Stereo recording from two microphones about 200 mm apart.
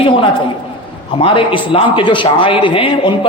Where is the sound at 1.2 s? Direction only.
25° left (ahead or behind).